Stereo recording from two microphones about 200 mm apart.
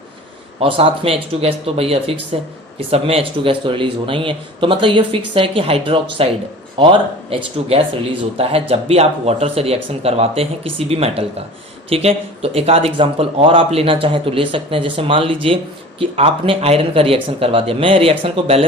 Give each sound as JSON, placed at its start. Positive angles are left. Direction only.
{"t": 0.6, "sound": "speech", "side_deg": -25}